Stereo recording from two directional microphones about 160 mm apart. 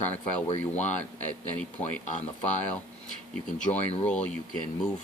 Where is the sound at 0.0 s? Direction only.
45° left (ahead or behind).